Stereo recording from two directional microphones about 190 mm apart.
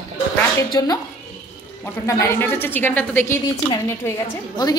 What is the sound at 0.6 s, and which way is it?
Speech, 20° left (ahead or behind).